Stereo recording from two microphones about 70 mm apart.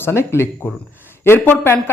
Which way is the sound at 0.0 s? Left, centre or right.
Left.